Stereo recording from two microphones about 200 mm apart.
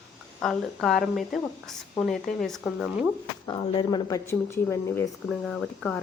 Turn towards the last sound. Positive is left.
turn(degrees=5)  # may be behind; listen again after turning